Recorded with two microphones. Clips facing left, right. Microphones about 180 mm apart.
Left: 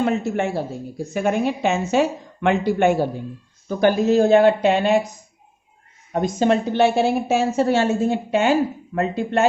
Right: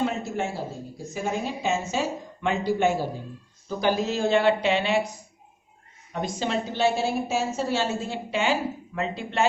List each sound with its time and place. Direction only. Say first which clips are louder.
0.0 s a woman's voice: left 6 dB; 60° left (ahead or behind); by 5.0 s 45° left (ahead or behind)
6.1 s a woman's voice: left 9 dB; 50° left (ahead or behind)